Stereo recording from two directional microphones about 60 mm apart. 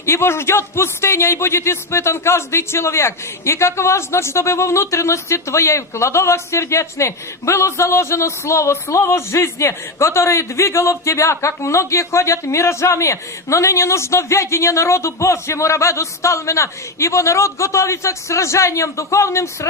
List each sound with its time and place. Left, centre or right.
0.0 s speech: left